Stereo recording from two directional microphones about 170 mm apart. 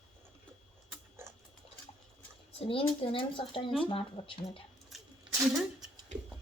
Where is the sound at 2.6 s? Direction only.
30° left (ahead or behind).